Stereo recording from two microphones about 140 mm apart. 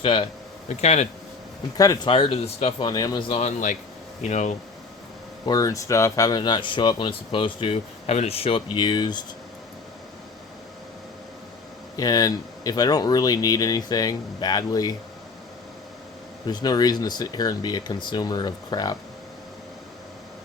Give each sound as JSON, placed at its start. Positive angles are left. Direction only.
{"t": 0.0, "sound": "speech", "side_deg": 35}
{"t": 0.7, "sound": "speech", "side_deg": 50}
{"t": 2.0, "sound": "speech", "side_deg": 40}
{"t": 3.4, "sound": "speech", "side_deg": 60}
{"t": 5.5, "sound": "speech", "side_deg": 25}
{"t": 11.9, "sound": "speech", "side_deg": 25}
{"t": 16.5, "sound": "speech", "side_deg": 30}